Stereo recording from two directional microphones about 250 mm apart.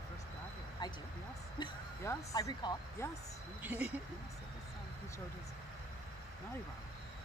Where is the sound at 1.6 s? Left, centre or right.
Centre.